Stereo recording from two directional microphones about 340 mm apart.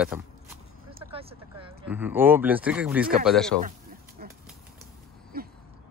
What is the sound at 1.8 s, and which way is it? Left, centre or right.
Speech, centre.